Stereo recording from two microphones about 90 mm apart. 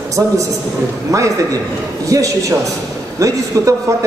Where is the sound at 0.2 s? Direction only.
40° right (ahead or behind).